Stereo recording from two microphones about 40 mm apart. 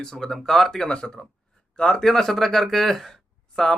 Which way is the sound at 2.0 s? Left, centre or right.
Centre.